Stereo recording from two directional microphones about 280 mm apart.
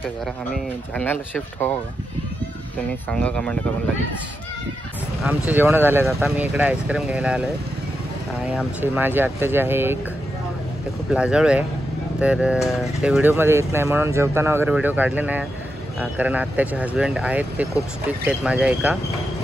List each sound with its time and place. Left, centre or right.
0.9 s speech: centre
3.1 s speech: centre
5.2 s speech: centre
8.5 s speech: centre
11.1 s speech: centre